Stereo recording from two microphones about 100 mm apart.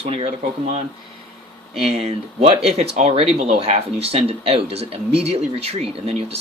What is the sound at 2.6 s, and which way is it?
Speech, 90° right.